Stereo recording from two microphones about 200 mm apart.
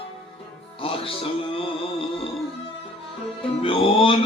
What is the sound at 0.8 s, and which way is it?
Music, 30° left (ahead or behind).